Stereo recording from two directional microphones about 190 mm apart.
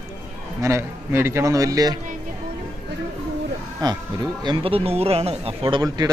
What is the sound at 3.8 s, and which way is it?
A man's voice, 20° right (ahead or behind).